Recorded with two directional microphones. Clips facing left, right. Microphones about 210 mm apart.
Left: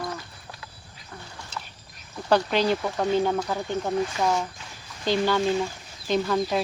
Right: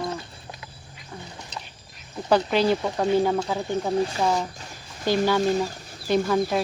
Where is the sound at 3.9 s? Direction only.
30° right (ahead or behind).